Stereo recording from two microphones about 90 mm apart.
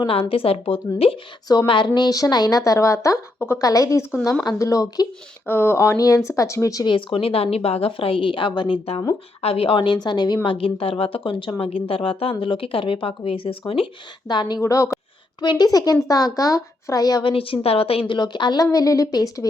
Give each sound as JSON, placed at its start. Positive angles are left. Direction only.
{"t": 0.1, "sound": "speech", "side_deg": 90}
{"t": 1.6, "sound": "a woman's voice", "side_deg": 65}
{"t": 2.0, "sound": "speech", "side_deg": 45}
{"t": 3.3, "sound": "a woman's voice", "side_deg": 25}
{"t": 3.6, "sound": "speech", "side_deg": 40}
{"t": 5.5, "sound": "speech", "side_deg": 25}
{"t": 6.8, "sound": "speech", "side_deg": 80}
{"t": 9.4, "sound": "a woman's voice", "side_deg": 90}
{"t": 10.5, "sound": "speech", "side_deg": 90}
{"t": 14.3, "sound": "speech", "side_deg": 55}
{"t": 14.6, "sound": "speech", "side_deg": 40}
{"t": 15.4, "sound": "speech", "side_deg": 50}
{"t": 17.2, "sound": "speech", "side_deg": 90}
{"t": 18.1, "sound": "speech", "side_deg": 60}